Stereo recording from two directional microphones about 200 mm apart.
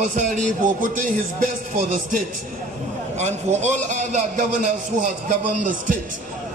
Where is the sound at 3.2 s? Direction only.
35° right (ahead or behind).